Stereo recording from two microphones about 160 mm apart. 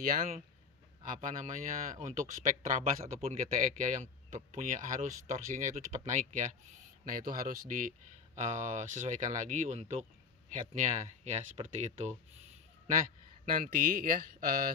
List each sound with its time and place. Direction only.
0.0 s speech: 60° right (ahead or behind)
7.1 s speech: 60° right (ahead or behind); by 12.1 s 45° right (ahead or behind)
13.5 s speech: 60° right (ahead or behind)